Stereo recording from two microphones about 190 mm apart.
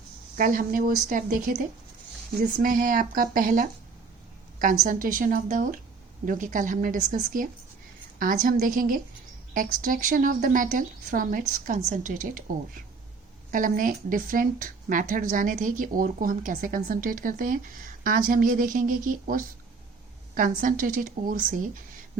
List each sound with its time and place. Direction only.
0.3 s speech: 45° right (ahead or behind)
13.5 s speech: 45° right (ahead or behind)